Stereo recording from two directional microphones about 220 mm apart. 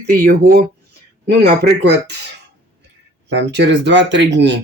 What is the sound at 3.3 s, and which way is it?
Speech, 50° right (ahead or behind).